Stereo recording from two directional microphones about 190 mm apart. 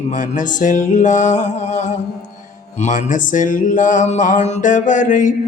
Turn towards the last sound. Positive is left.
turn(degrees=40)  # may be behind; listen again after turning